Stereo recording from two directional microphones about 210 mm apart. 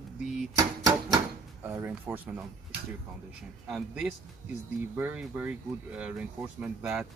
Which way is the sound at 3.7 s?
Centre (ahead or behind).